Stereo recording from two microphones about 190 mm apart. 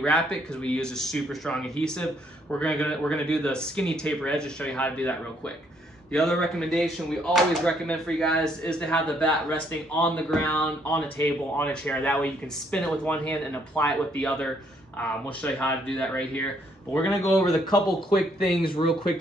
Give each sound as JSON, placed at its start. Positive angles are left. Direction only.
{"t": 0.0, "sound": "speech", "side_deg": 5}
{"t": 6.1, "sound": "speech", "side_deg": 0}